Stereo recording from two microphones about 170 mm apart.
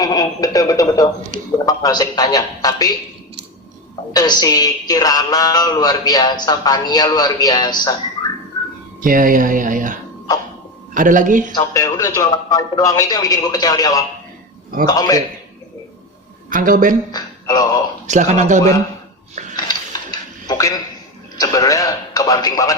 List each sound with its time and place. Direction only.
0.0 s a man's voice: 20° left (ahead or behind)
4.1 s speech: 25° left (ahead or behind)
9.0 s speech: 55° right (ahead or behind)
11.5 s speech: 20° left (ahead or behind)
16.5 s speech: 55° right (ahead or behind)
17.1 s music: 25° left (ahead or behind)
18.0 s speech: 45° right (ahead or behind)
19.5 s dishes: 25° left (ahead or behind)
21.3 s speech: 20° left (ahead or behind)